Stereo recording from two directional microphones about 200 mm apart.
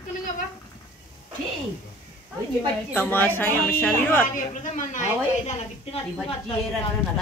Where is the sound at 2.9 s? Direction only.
10° left (ahead or behind).